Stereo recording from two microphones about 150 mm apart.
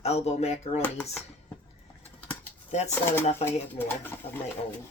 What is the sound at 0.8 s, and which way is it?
Speech, 15° left (ahead or behind).